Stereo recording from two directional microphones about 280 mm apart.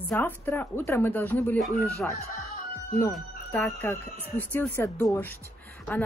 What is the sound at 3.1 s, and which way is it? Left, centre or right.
Speech, centre.